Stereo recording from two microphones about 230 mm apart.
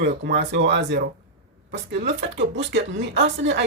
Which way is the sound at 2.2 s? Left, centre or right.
Right.